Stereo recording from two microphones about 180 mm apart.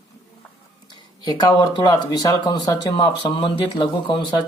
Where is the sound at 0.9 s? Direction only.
25° left (ahead or behind).